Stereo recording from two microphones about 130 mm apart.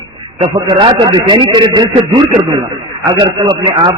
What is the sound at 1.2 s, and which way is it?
Speech, 40° right (ahead or behind).